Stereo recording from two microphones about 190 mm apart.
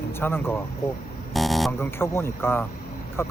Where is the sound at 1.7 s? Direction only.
10° left (ahead or behind).